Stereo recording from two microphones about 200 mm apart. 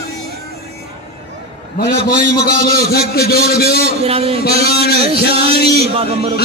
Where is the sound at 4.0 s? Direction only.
30° right (ahead or behind).